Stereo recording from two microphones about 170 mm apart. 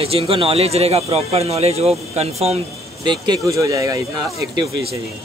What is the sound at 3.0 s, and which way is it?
Speech, 25° right (ahead or behind).